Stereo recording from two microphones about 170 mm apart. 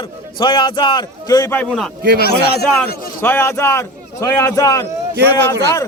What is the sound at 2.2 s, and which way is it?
Speech, 70° left (ahead or behind).